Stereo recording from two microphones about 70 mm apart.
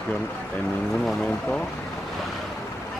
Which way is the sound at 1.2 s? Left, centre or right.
Centre.